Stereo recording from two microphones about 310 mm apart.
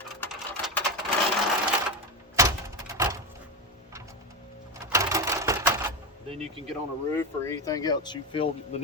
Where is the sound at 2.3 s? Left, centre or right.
Centre.